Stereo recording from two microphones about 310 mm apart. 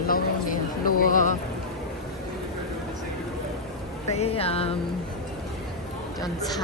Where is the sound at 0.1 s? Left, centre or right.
Left.